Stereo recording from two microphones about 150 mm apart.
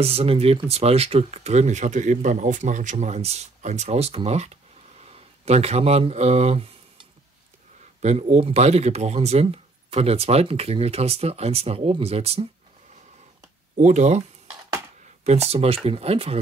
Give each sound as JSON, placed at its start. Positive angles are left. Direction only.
{"t": 0.0, "sound": "speech", "side_deg": -40}
{"t": 8.0, "sound": "speech", "side_deg": -50}
{"t": 13.7, "sound": "speech", "side_deg": -50}
{"t": 15.2, "sound": "speech", "side_deg": -45}